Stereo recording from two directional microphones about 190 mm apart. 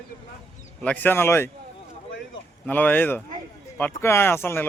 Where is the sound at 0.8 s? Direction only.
10° left (ahead or behind).